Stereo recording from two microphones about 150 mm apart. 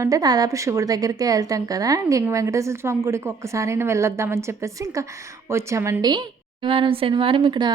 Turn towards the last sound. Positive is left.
turn(degrees=-30)  # may be behind; listen again after turning